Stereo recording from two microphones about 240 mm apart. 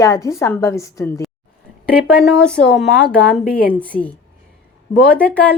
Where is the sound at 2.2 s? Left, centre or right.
Centre.